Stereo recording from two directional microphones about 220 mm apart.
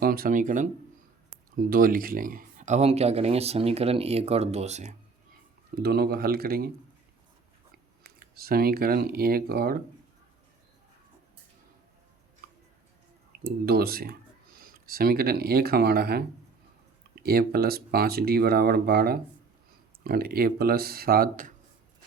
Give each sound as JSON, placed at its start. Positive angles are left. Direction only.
{"t": 0.0, "sound": "speech", "side_deg": -40}
{"t": 5.8, "sound": "speech", "side_deg": -45}
{"t": 8.0, "sound": "speech", "side_deg": -45}
{"t": 13.4, "sound": "speech", "side_deg": -45}
{"t": 17.2, "sound": "speech", "side_deg": -45}